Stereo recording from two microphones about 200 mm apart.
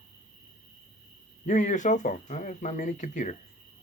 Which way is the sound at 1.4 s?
40° left (ahead or behind).